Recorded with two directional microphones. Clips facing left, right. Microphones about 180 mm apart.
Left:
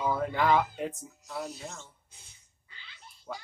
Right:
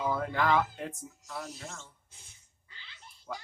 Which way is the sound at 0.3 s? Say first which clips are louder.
Left 2 dB; 15° left (ahead or behind).